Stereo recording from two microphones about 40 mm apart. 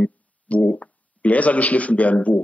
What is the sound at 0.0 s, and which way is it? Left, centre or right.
Speech, left.